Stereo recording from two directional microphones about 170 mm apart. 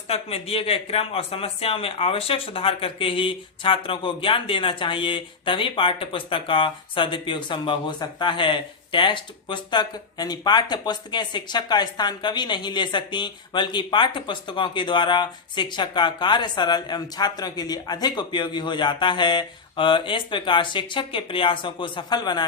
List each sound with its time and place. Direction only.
0.1 s speech: 35° left (ahead or behind)